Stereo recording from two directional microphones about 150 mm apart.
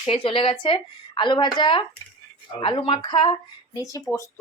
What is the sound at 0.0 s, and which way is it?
Speech, 35° left (ahead or behind).